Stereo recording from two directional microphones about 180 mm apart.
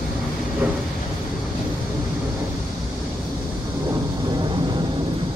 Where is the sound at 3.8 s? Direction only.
25° right (ahead or behind).